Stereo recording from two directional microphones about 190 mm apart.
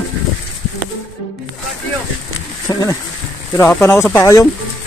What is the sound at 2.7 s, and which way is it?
Speech, 20° left (ahead or behind).